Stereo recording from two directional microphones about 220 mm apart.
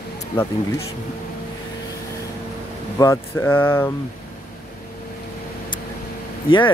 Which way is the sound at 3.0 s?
10° left (ahead or behind).